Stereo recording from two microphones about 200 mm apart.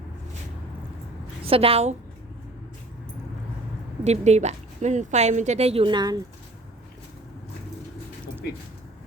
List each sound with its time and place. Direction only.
1.5 s a woman's voice: 30° right (ahead or behind)
4.0 s speech: 35° right (ahead or behind)